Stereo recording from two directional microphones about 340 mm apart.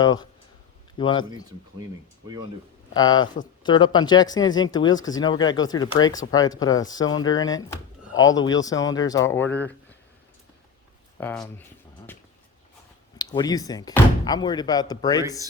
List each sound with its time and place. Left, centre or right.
0.0 s speech: centre
2.9 s speech: centre
11.2 s speech: centre
13.1 s speech: centre